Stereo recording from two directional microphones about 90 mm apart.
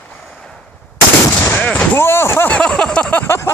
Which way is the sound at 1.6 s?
15° left (ahead or behind).